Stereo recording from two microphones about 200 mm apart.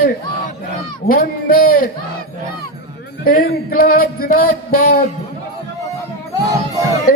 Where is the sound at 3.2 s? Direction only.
45° left (ahead or behind).